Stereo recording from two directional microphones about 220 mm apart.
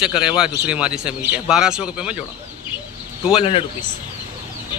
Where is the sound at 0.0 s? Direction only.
5° right (ahead or behind).